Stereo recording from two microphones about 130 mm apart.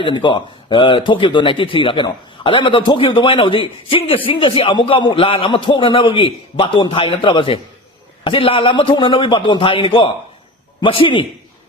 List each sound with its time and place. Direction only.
0.0 s a man's voice: 35° left (ahead or behind)